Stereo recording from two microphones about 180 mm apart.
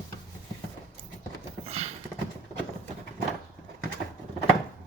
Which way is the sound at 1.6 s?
35° right (ahead or behind).